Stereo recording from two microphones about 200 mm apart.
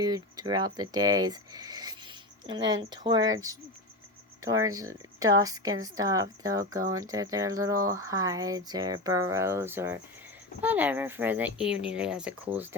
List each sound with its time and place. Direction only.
0.1 s speech: 20° right (ahead or behind); by 12.3 s 5° right (ahead or behind)